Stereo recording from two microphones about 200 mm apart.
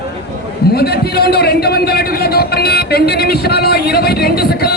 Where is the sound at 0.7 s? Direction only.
50° left (ahead or behind).